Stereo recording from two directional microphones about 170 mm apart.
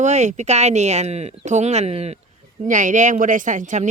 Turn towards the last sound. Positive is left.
turn(degrees=-45)  # may be behind; listen again after turning